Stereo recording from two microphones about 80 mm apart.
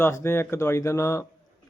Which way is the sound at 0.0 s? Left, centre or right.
Left.